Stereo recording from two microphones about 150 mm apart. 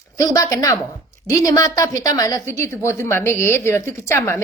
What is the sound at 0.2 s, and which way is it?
A woman's voice, 25° left (ahead or behind).